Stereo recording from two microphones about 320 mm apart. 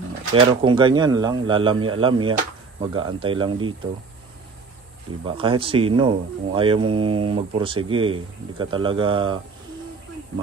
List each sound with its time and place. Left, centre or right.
0.3 s speech: centre
5.2 s speech: centre